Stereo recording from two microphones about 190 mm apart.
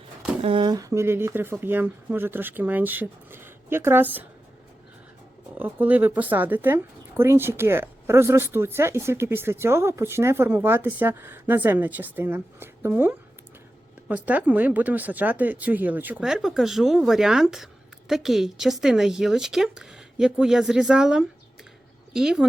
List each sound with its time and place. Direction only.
0.4 s speech: 25° right (ahead or behind); by 4.3 s 10° right (ahead or behind)
5.5 s speech: 10° right (ahead or behind)